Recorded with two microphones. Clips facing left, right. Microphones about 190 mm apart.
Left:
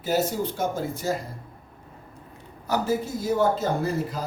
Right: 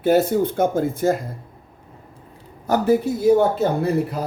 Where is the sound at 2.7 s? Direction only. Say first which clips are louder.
Right 7 dB; 60° right (ahead or behind).